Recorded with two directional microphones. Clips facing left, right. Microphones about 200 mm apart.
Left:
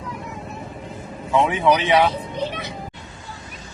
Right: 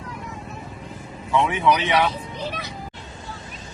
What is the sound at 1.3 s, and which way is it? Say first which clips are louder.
Speech: left 2 dB; 20° left (ahead or behind).